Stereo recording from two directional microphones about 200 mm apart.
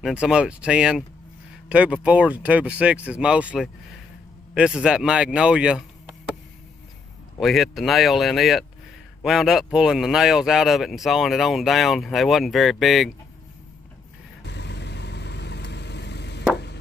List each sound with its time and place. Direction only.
0.0 s speech: 5° right (ahead or behind)
7.3 s speech: centre (ahead or behind)
14.4 s vehicle: 60° left (ahead or behind)